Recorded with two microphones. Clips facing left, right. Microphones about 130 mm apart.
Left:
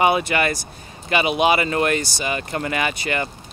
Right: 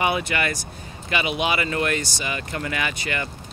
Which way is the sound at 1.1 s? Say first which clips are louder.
Left 6 dB; 50° left (ahead or behind).